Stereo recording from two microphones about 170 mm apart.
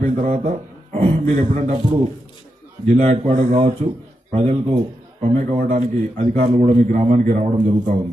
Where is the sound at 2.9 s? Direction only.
40° right (ahead or behind).